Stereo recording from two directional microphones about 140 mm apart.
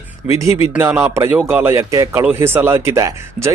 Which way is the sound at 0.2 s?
10° right (ahead or behind).